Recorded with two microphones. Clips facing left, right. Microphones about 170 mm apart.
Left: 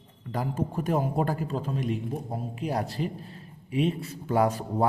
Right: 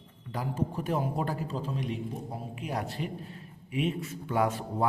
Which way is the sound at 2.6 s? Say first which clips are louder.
Left 5 dB; 35° left (ahead or behind).